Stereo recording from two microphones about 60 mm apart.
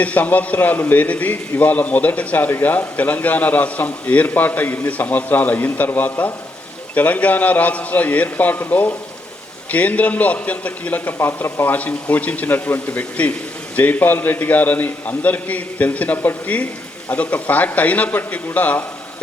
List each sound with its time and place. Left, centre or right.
0.0 s a man's voice: left
1.0 s a man's voice: left
11.4 s a man's voice: left